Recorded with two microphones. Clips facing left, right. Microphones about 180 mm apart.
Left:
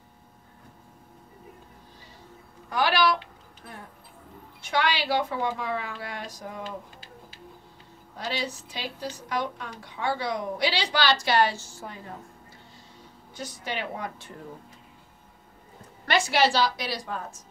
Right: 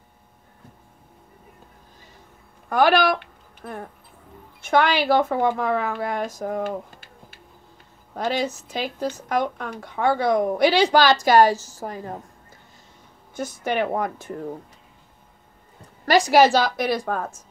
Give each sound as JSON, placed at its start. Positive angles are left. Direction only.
{"t": 2.7, "sound": "a woman's voice", "side_deg": -50}
{"t": 13.4, "sound": "a woman's voice", "side_deg": -50}
{"t": 16.1, "sound": "a woman's voice", "side_deg": -40}